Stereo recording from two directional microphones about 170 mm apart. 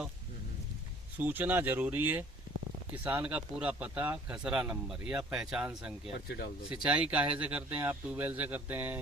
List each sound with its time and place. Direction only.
1.2 s speech: 10° right (ahead or behind)
6.2 s speech: 70° left (ahead or behind)
6.7 s speech: 5° right (ahead or behind)